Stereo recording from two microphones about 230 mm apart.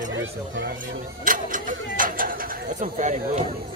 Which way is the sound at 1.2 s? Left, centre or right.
Right.